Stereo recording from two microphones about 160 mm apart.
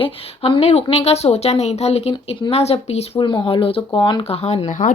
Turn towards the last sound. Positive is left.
turn(degrees=40)  # may be behind; listen again after turning